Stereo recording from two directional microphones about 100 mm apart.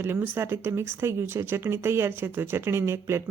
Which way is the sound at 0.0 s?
25° right (ahead or behind).